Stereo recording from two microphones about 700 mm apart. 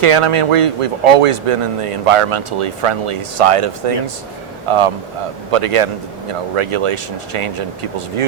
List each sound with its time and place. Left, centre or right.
0.0 s speech: right